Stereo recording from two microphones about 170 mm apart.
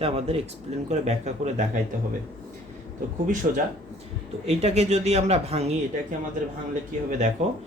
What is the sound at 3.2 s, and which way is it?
Speech, 50° right (ahead or behind).